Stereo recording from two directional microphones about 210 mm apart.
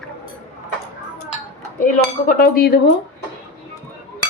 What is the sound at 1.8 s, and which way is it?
A woman's voice, 40° left (ahead or behind).